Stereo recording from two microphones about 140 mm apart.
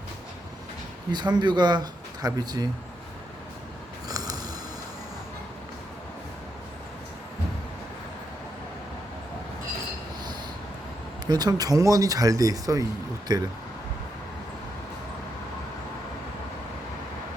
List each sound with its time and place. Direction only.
1.1 s speech: 30° right (ahead or behind)
4.1 s a sound: 25° right (ahead or behind)
11.3 s speech: 30° right (ahead or behind)